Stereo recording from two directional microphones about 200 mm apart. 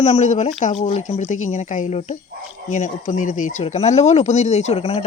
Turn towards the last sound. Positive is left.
turn(degrees=30)  # may be behind; listen again after turning